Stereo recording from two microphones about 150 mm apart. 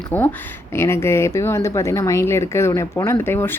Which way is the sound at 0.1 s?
15° left (ahead or behind).